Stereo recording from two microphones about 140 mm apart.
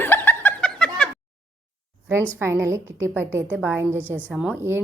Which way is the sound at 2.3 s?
15° right (ahead or behind).